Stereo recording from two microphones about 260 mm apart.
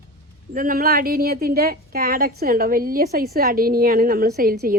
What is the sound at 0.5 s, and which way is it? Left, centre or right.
A woman's voice, right.